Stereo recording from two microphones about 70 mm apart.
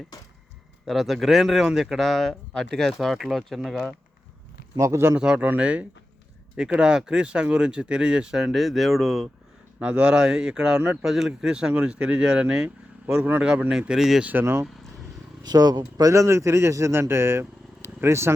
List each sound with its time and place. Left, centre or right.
0.1 s speech: left
0.9 s speech: centre
4.8 s speech: right
5.1 s speech: centre
9.8 s speech: centre
14.2 s speech: right
15.4 s speech: right
16.1 s speech: right